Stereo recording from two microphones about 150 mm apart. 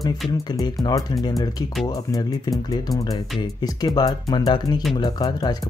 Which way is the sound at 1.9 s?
25° left (ahead or behind).